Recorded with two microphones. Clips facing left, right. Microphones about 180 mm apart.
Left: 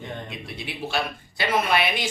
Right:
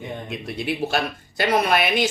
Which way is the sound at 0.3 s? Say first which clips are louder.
Right 8 dB; 45° right (ahead or behind).